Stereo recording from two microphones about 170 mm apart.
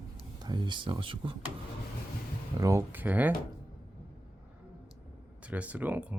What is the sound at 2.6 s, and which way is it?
Speech, 20° right (ahead or behind).